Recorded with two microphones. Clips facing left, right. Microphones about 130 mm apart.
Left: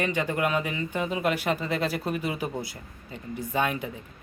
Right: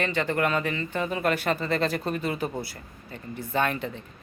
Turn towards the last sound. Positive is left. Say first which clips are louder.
# right 1 dB
turn(degrees=10)  # may be behind; listen again after turning